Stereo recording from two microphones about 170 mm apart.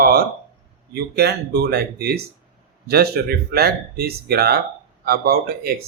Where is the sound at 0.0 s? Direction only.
60° right (ahead or behind).